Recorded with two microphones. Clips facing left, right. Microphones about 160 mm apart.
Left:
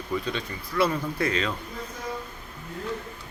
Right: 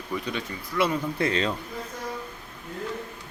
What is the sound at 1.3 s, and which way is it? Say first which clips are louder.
Speech: right 2 dB; 35° right (ahead or behind).